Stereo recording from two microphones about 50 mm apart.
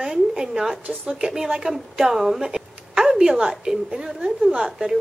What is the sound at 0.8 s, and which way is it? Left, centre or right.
Speech, right.